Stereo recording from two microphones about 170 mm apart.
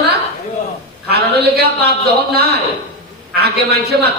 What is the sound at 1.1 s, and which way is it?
A man's voice, 70° right (ahead or behind).